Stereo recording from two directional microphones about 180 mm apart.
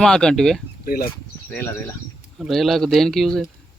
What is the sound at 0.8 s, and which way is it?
Speech, 55° left (ahead or behind).